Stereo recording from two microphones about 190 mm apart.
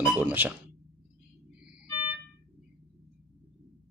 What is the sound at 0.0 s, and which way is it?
Speech, 10° right (ahead or behind).